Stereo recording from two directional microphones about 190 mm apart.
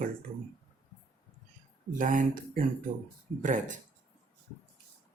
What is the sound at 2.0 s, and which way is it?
Speech, 45° right (ahead or behind).